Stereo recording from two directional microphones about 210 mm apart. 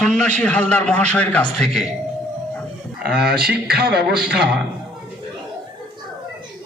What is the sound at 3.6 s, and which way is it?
Speech, 50° right (ahead or behind).